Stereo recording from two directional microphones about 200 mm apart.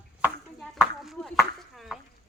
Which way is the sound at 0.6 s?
Centre (ahead or behind).